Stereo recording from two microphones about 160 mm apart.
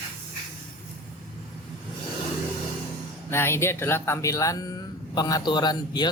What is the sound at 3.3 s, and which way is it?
Speech, 15° left (ahead or behind).